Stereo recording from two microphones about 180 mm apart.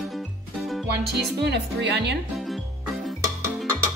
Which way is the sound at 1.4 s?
70° right (ahead or behind).